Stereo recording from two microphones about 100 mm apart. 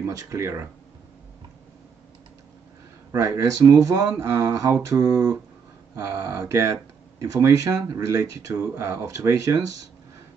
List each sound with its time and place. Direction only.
0.0 s speech: 35° right (ahead or behind)
3.1 s speech: 30° right (ahead or behind)